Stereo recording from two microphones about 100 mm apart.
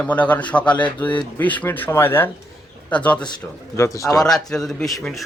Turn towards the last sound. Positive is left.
turn(degrees=5)  # may be behind; listen again after turning